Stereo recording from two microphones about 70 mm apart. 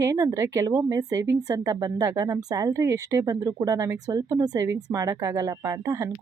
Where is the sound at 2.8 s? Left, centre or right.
Right.